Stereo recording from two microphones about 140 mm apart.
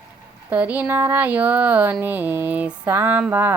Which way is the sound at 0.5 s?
10° right (ahead or behind).